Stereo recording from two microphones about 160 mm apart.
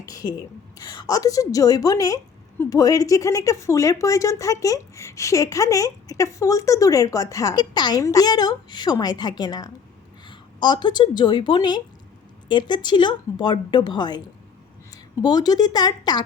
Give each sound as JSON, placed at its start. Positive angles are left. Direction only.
{"t": 0.0, "sound": "a woman's voice", "side_deg": 20}
{"t": 10.2, "sound": "a sound", "side_deg": 30}
{"t": 10.8, "sound": "a woman's voice", "side_deg": 30}
{"t": 15.2, "sound": "a woman's voice", "side_deg": 25}